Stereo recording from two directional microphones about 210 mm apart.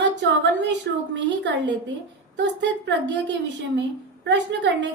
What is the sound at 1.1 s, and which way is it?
A woman's voice, 60° right (ahead or behind).